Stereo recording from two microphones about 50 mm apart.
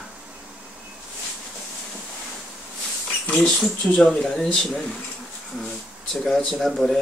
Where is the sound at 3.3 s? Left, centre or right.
Centre.